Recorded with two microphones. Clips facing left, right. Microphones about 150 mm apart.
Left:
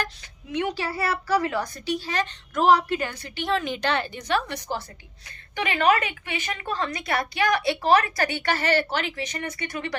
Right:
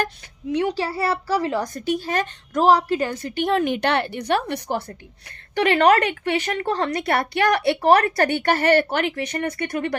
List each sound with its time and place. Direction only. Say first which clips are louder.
0.5 s a child's voice: right 4 dB; 35° right (ahead or behind)
1.6 s a woman's voice: right 5 dB; 45° right (ahead or behind)
5.5 s a woman's voice: right 6 dB; 70° right (ahead or behind)